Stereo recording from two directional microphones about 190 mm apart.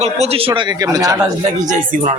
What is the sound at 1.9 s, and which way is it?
Speech, 45° right (ahead or behind).